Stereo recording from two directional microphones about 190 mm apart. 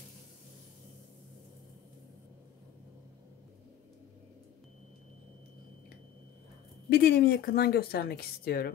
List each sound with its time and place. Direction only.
6.9 s speech: 55° left (ahead or behind)